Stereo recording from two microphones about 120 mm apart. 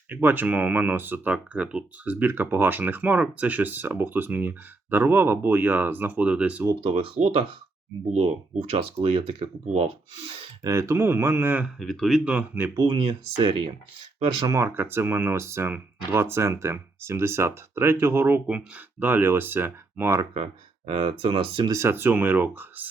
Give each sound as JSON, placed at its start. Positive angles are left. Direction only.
{"t": 0.1, "sound": "speech", "side_deg": -15}
{"t": 6.8, "sound": "speech", "side_deg": -50}
{"t": 10.6, "sound": "speech", "side_deg": -25}
{"t": 11.6, "sound": "speech", "side_deg": 0}
{"t": 12.8, "sound": "speech", "side_deg": -45}
{"t": 14.4, "sound": "speech", "side_deg": -25}
{"t": 20.3, "sound": "speech", "side_deg": -50}
{"t": 21.7, "sound": "speech", "side_deg": -20}